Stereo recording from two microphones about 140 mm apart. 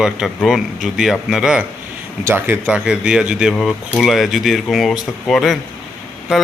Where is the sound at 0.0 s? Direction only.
5° right (ahead or behind).